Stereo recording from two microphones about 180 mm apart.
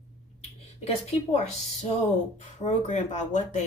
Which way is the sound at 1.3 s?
35° left (ahead or behind).